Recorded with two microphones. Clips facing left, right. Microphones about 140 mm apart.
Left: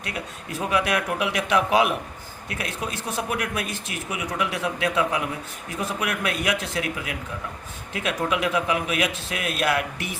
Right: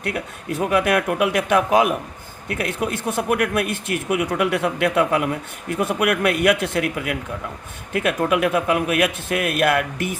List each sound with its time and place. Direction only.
0.0 s speech: 55° right (ahead or behind)
2.5 s speech: 55° right (ahead or behind)